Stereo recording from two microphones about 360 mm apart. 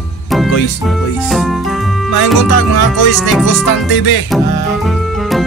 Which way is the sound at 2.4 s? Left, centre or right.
Left.